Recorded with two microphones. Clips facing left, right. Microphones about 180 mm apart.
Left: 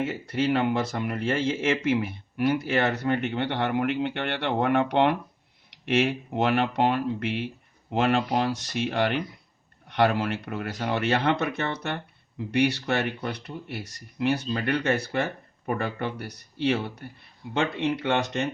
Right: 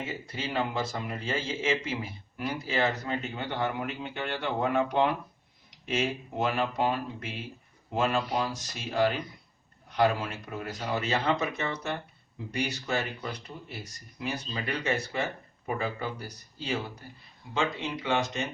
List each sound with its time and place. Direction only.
0.0 s speech: 65° left (ahead or behind)